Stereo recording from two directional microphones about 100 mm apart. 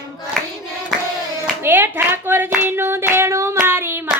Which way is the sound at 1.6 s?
20° right (ahead or behind).